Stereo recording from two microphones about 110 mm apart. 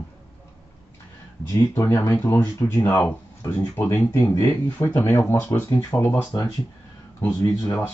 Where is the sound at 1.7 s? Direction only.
30° left (ahead or behind).